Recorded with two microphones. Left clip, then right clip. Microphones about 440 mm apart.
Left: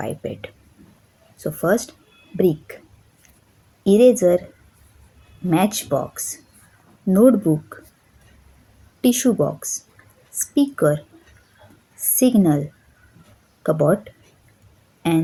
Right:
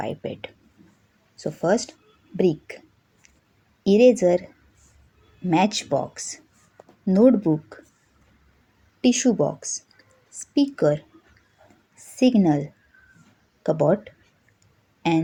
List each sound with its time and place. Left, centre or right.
0.0 s a sound: left
1.4 s speech: left
3.8 s speech: left
5.5 s speech: left
9.0 s speech: left
12.1 s speech: left
15.0 s a sound: left